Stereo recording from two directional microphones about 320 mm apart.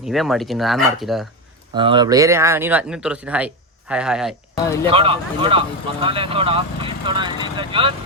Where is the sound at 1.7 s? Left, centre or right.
Centre.